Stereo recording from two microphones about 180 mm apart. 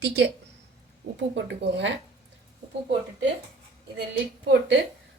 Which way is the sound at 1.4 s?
80° right.